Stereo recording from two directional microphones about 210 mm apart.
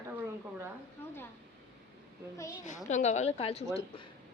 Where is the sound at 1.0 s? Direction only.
10° left (ahead or behind).